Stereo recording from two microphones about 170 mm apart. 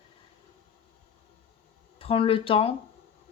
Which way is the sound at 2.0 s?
30° left (ahead or behind).